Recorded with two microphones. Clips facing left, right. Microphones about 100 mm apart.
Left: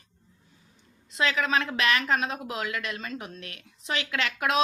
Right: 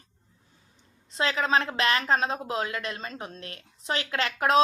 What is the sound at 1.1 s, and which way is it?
Speech, 35° right (ahead or behind).